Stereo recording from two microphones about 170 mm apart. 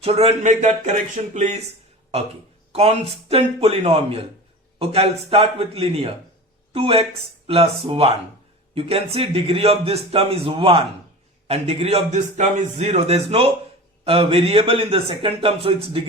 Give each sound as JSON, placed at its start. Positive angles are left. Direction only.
{"t": 0.0, "sound": "a man's voice", "side_deg": -35}
{"t": 2.7, "sound": "a man's voice", "side_deg": -35}